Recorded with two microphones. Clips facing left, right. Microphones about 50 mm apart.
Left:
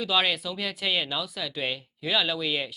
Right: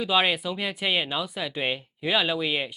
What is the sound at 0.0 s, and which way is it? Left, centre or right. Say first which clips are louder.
Speech: right 2 dB; centre.